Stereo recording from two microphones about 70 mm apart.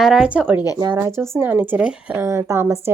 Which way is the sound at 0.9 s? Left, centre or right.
Right.